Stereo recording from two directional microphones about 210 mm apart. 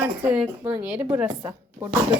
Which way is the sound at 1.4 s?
15° right (ahead or behind).